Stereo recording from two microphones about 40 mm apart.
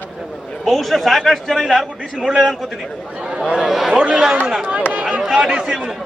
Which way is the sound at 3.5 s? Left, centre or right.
Centre.